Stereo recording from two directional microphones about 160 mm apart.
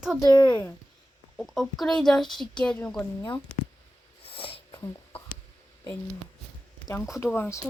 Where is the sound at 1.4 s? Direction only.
Centre (ahead or behind).